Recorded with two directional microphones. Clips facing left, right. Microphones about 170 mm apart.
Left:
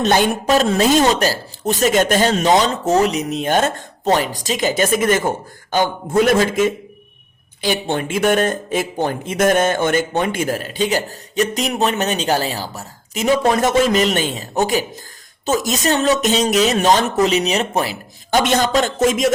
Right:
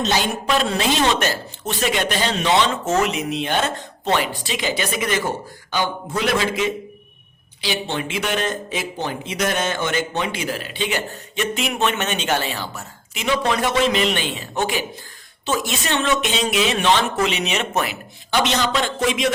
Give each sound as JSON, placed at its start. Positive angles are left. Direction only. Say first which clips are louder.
{"t": 0.0, "sound": "speech", "louder": "left 6 dB", "side_deg": 55}
{"t": 18.3, "sound": "speech", "louder": "left 4 dB", "side_deg": 45}